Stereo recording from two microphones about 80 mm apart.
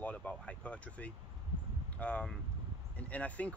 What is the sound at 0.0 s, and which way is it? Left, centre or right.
Speech, centre.